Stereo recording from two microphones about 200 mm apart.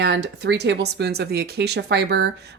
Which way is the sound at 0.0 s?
55° right (ahead or behind).